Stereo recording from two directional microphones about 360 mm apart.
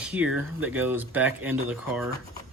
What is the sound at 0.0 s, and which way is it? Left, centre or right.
Speech, centre.